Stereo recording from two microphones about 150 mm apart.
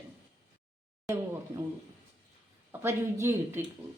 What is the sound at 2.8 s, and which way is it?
Speech, 15° right (ahead or behind).